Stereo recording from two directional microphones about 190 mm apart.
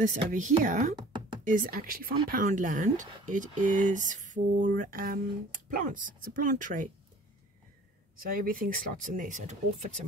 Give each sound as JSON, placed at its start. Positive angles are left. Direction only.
{"t": 0.0, "sound": "a woman's voice", "side_deg": -40}
{"t": 8.2, "sound": "speech", "side_deg": -45}